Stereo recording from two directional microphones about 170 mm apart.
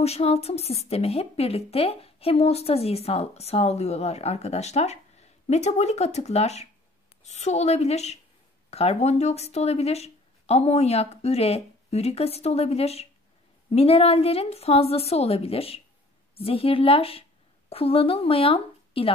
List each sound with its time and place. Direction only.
0.0 s a woman's voice: 35° left (ahead or behind)